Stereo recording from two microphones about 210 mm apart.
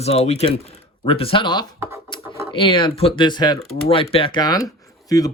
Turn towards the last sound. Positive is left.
turn(degrees=15)  # may be behind; listen again after turning